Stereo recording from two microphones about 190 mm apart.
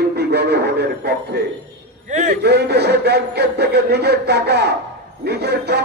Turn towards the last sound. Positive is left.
turn(degrees=-60)  # may be behind; listen again after turning